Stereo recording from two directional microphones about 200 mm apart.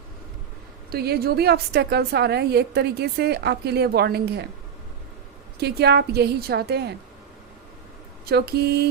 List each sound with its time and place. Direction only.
0.9 s a woman's voice: 50° right (ahead or behind)
5.5 s a woman's voice: 55° right (ahead or behind)
8.3 s a woman's voice: 50° right (ahead or behind)